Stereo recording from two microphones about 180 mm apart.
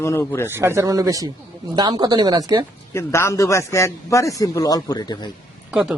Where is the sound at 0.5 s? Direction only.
15° right (ahead or behind).